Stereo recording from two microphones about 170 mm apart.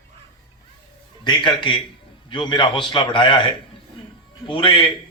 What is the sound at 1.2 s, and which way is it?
A man's voice, 25° left (ahead or behind).